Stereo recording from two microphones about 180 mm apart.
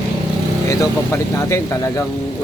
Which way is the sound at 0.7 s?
15° left (ahead or behind).